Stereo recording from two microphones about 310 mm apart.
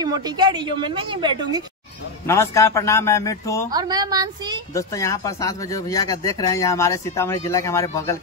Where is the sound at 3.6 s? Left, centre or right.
Centre.